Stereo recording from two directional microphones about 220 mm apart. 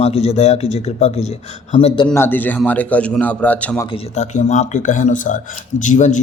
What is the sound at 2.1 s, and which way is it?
A man's voice, 10° left (ahead or behind).